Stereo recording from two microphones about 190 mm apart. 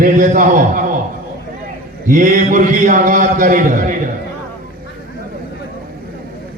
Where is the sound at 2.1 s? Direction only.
45° right (ahead or behind).